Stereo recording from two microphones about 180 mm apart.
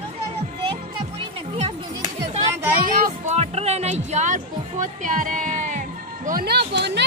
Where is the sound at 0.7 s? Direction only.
30° right (ahead or behind).